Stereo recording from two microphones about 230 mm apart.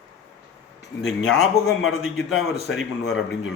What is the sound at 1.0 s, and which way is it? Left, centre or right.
Speech, centre.